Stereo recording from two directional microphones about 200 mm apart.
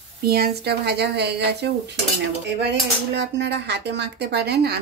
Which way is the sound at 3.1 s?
60° right (ahead or behind).